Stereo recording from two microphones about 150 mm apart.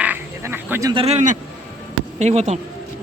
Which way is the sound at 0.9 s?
45° right (ahead or behind).